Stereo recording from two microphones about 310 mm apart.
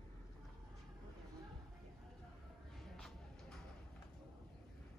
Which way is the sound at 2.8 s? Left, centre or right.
Centre.